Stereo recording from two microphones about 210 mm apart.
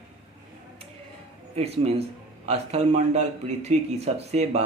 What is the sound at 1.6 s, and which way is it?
Speech, 30° right (ahead or behind).